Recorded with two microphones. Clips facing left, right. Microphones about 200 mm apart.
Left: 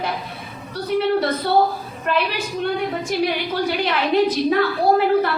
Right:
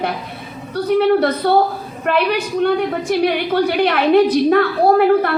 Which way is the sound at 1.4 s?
55° right (ahead or behind).